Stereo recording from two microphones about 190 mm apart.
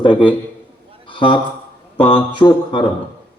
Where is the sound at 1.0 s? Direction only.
25° left (ahead or behind).